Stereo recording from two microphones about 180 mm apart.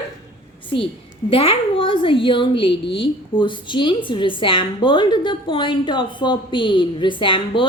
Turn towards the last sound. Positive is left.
turn(degrees=30)  # may be behind; listen again after turning